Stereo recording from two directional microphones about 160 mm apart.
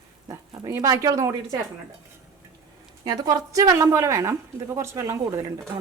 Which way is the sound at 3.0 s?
25° right (ahead or behind).